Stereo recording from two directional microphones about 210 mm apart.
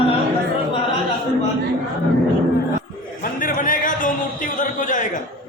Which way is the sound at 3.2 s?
40° left (ahead or behind).